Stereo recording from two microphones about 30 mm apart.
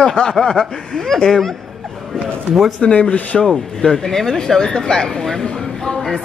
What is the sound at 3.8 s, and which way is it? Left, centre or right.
Speech, centre.